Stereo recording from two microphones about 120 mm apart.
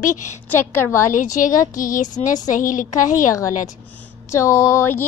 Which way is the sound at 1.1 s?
90° left.